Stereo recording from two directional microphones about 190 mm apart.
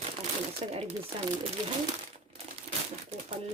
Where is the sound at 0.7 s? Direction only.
35° right (ahead or behind).